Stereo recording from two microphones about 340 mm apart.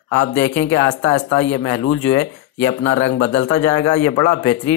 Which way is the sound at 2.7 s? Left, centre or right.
Left.